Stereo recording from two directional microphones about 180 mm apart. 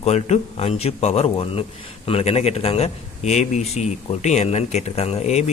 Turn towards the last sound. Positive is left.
turn(degrees=40)  # may be behind; listen again after turning